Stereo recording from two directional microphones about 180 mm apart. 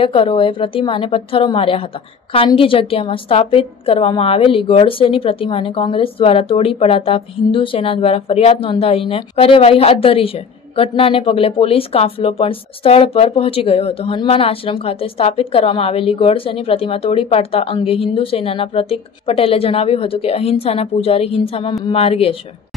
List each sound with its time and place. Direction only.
0.0 s a woman's voice: 30° left (ahead or behind)